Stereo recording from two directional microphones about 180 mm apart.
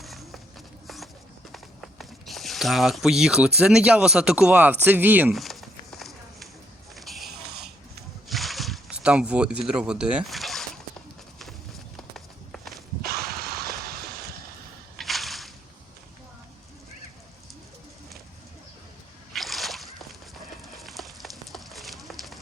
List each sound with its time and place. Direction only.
0.0 s walk: centre (ahead or behind)
1.5 s speech: centre (ahead or behind)
5.4 s a sound: centre (ahead or behind)
11.9 s walk: centre (ahead or behind)
12.7 s a sound: 60° right (ahead or behind)
14.9 s slosh: centre (ahead or behind)
19.3 s slosh: centre (ahead or behind)
20.7 s clip-clop: centre (ahead or behind)